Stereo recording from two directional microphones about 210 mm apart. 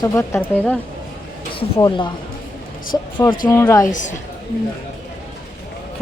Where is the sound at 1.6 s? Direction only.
20° left (ahead or behind).